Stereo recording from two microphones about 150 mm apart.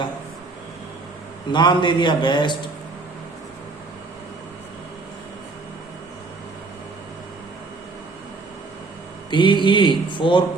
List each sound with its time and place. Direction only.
1.5 s mantra: 30° left (ahead or behind)
9.3 s mantra: 30° left (ahead or behind)